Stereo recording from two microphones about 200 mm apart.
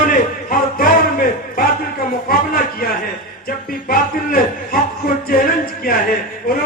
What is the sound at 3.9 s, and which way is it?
A man's voice, 45° left (ahead or behind).